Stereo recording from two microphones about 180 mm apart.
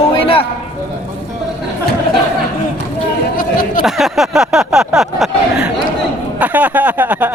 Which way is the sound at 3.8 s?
Centre (ahead or behind).